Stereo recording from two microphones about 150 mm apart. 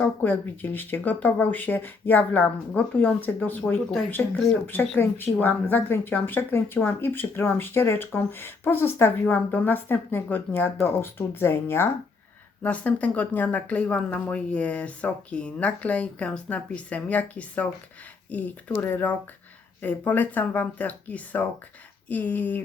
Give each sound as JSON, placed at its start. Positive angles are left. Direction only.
{"t": 0.0, "sound": "speech", "side_deg": 10}
{"t": 4.6, "sound": "speech", "side_deg": 15}